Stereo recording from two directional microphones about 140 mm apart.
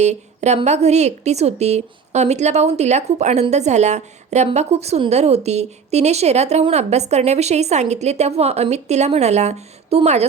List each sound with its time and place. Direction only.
0.0 s a woman's voice: 55° right (ahead or behind)